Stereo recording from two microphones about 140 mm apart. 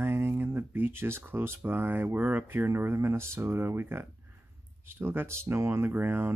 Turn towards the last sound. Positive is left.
turn(degrees=-15)  # may be behind; listen again after turning